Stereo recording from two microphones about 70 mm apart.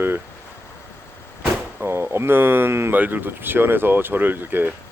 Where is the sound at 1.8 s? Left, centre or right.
Right.